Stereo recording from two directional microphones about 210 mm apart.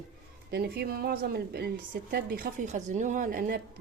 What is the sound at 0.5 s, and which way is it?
Speech, 50° right (ahead or behind).